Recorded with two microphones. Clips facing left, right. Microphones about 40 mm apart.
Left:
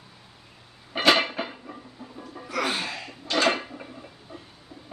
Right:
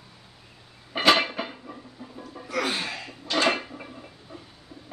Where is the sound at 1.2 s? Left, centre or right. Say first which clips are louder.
Even; centre.